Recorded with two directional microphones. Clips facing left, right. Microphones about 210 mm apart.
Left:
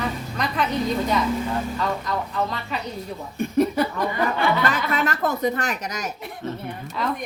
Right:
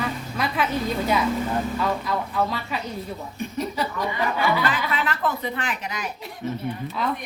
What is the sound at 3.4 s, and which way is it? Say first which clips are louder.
Chuckle: left 8 dB; 55° left (ahead or behind).